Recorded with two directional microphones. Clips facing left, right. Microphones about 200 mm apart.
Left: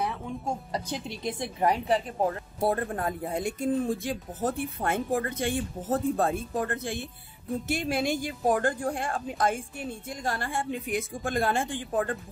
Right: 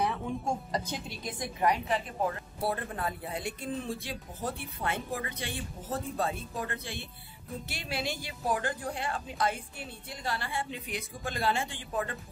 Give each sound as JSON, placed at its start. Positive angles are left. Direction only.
{"t": 0.7, "sound": "a woman's voice", "side_deg": 5}
{"t": 1.0, "sound": "a woman's voice", "side_deg": 25}
{"t": 2.6, "sound": "a woman's voice", "side_deg": 45}